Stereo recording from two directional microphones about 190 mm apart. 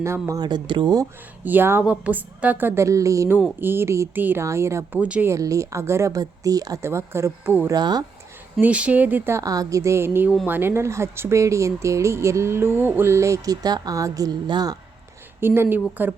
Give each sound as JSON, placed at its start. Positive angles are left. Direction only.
{"t": 0.0, "sound": "speech", "side_deg": -15}
{"t": 1.5, "sound": "speech", "side_deg": -10}
{"t": 7.8, "sound": "speech", "side_deg": -20}
{"t": 8.5, "sound": "speech", "side_deg": -5}